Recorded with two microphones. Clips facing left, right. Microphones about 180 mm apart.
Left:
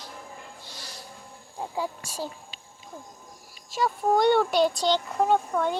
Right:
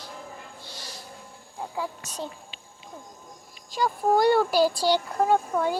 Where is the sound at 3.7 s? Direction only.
Centre (ahead or behind).